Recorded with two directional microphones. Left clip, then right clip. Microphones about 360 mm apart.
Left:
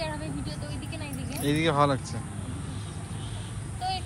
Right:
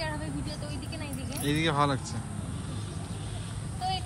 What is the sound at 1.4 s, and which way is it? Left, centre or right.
Speech, centre.